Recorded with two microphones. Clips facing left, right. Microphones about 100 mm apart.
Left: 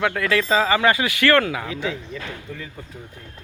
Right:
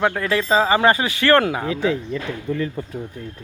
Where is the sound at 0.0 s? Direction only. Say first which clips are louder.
Right 1 dB; 25° right (ahead or behind).